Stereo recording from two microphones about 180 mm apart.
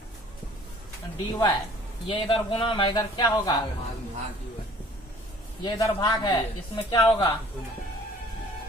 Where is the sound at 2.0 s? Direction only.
30° left (ahead or behind).